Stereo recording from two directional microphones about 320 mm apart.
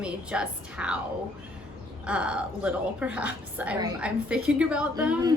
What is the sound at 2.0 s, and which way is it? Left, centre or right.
A woman's voice, centre.